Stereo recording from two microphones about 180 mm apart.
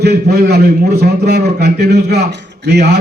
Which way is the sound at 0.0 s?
60° right (ahead or behind).